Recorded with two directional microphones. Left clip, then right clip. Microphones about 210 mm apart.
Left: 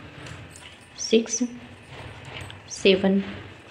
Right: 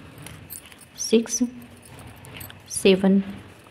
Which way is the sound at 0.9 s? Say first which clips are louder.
Even; 35° right (ahead or behind).